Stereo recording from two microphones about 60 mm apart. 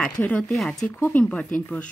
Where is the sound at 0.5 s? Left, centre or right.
Centre.